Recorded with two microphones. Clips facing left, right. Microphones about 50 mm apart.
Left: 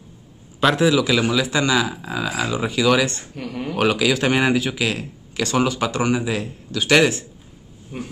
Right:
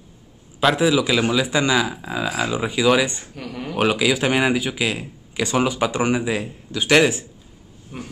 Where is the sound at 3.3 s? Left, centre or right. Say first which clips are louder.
Left 2 dB; centre.